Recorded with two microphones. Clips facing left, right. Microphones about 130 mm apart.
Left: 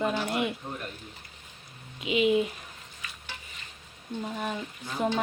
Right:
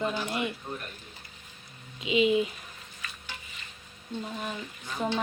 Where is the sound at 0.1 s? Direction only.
5° left (ahead or behind).